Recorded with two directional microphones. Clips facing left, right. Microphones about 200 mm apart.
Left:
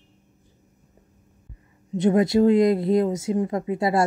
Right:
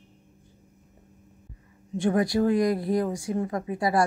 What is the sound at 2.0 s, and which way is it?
Speech, 20° left (ahead or behind).